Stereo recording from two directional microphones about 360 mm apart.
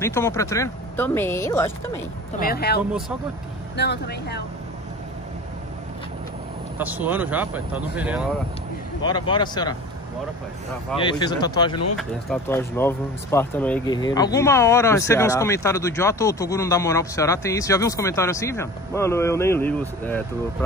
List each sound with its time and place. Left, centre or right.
0.0 s speech: centre
2.3 s speech: left
6.8 s speech: centre
9.0 s speech: centre
11.0 s speech: centre